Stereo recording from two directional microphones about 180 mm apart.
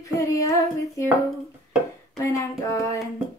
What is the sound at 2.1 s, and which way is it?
Speech, 20° left (ahead or behind).